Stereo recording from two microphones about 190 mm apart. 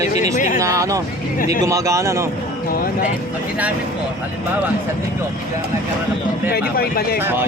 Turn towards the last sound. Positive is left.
turn(degrees=55)  # may be behind; listen again after turning